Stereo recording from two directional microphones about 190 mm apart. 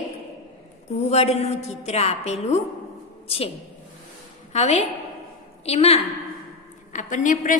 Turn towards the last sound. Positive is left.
turn(degrees=45)  # may be behind; listen again after turning